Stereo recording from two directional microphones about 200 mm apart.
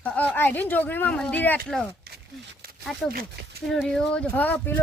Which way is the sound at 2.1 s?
55° right (ahead or behind).